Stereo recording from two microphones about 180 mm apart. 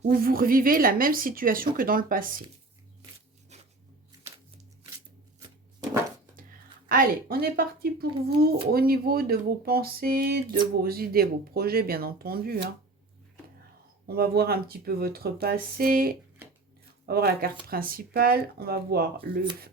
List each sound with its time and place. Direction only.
0.0 s speech: 55° right (ahead or behind)
3.5 s music: 40° right (ahead or behind)
6.8 s speech: 55° right (ahead or behind)
14.1 s speech: 60° right (ahead or behind)